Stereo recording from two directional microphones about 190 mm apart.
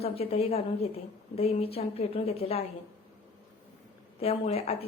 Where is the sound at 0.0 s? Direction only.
30° left (ahead or behind).